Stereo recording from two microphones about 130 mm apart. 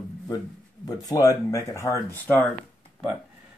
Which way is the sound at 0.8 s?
30° left (ahead or behind).